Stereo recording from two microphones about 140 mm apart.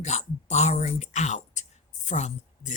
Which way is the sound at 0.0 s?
50° left (ahead or behind).